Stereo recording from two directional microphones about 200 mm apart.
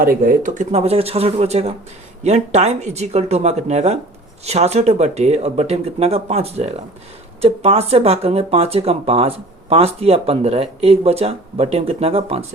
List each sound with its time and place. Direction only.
0.0 s speech: 45° right (ahead or behind); by 12.5 s 30° right (ahead or behind)